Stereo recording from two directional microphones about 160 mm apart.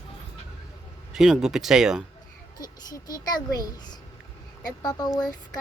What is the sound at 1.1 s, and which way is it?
Speech, 5° right (ahead or behind).